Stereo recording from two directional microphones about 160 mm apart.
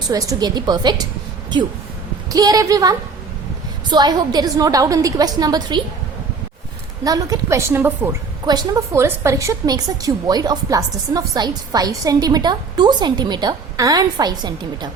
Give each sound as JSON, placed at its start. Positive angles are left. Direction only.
{"t": 0.1, "sound": "a woman's voice", "side_deg": -20}
{"t": 2.3, "sound": "a woman's voice", "side_deg": -25}
{"t": 7.0, "sound": "a woman's voice", "side_deg": -25}